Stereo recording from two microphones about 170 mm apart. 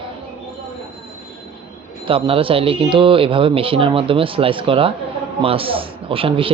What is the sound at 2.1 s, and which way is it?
Speech, 30° right (ahead or behind).